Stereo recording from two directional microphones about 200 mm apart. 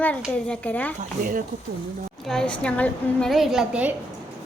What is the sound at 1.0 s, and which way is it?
Speech, 45° right (ahead or behind).